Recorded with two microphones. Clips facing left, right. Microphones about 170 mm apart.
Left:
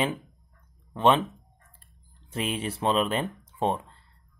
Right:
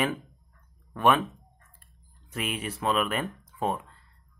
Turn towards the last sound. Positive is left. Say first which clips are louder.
# left 2 dB
turn(degrees=30)  # may be behind; listen again after turning